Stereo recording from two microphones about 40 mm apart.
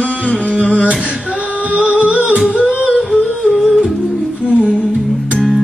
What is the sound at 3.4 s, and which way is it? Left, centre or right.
Music, centre.